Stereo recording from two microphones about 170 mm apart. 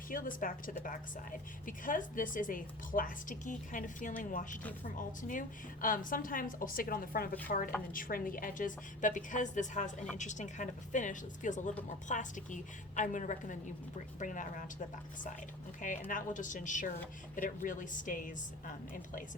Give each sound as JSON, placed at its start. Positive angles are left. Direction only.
{"t": 0.1, "sound": "a woman's voice", "side_deg": 55}
{"t": 16.0, "sound": "a woman's voice", "side_deg": 50}